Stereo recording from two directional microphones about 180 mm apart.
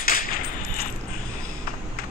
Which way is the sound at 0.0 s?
50° left (ahead or behind).